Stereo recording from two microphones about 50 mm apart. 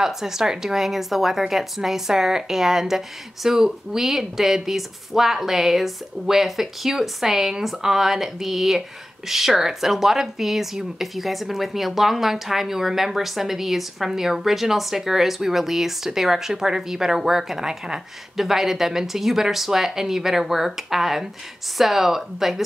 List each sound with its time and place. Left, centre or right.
0.0 s a woman's voice: centre